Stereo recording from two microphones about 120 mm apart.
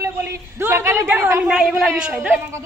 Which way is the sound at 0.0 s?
25° right (ahead or behind).